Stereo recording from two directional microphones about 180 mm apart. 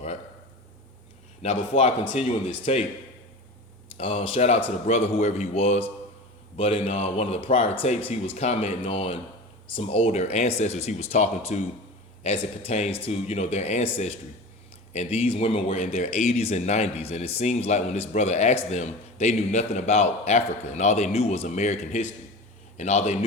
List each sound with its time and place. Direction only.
1.4 s speech: 35° left (ahead or behind)
3.9 s speech: 30° left (ahead or behind)